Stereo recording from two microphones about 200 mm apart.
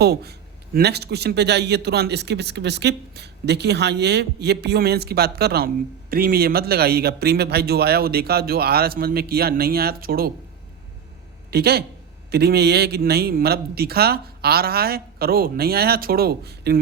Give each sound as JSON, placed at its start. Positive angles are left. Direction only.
{"t": 0.0, "sound": "speech", "side_deg": -55}
{"t": 11.5, "sound": "speech", "side_deg": -50}